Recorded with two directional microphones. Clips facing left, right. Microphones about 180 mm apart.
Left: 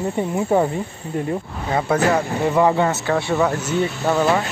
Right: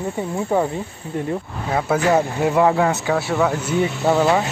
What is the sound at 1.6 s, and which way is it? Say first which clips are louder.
Speech: even; 5° right (ahead or behind).